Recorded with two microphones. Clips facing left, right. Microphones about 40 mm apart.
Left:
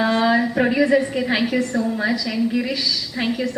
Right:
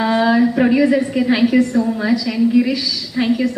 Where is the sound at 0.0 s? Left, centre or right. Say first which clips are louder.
Right 3 dB; centre.